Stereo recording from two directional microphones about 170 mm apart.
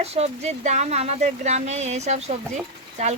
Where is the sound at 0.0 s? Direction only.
40° right (ahead or behind).